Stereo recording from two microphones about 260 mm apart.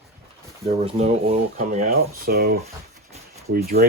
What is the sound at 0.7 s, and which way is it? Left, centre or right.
Speech, right.